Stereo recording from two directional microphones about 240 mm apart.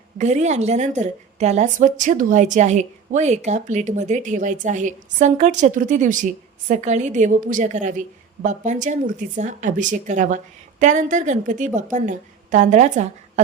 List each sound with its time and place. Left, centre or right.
0.2 s a woman's voice: right